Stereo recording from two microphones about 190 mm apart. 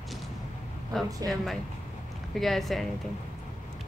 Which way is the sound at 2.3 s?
Centre (ahead or behind).